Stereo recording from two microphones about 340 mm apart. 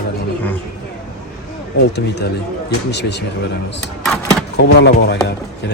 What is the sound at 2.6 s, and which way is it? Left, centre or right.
Speech, left.